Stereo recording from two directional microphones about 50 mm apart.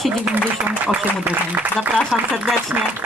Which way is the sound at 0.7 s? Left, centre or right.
Right.